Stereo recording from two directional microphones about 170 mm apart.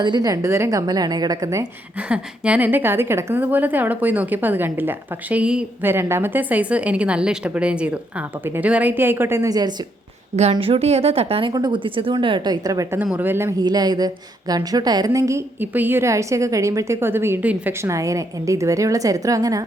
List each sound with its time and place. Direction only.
0.0 s speech: 25° right (ahead or behind)
2.0 s a woman's voice: 5° right (ahead or behind); by 9.7 s 20° right (ahead or behind)
10.3 s speech: 35° right (ahead or behind); by 19.6 s 20° right (ahead or behind)